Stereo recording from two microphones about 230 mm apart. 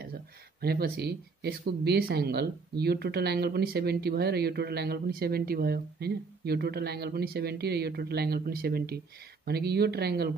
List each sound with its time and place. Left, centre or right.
0.6 s speech: right